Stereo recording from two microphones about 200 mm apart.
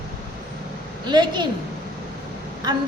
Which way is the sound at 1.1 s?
20° right (ahead or behind).